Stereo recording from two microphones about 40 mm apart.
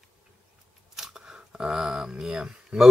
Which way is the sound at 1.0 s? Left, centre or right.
Centre.